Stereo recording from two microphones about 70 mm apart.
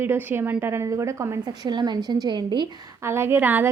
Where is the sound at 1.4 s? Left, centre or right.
Right.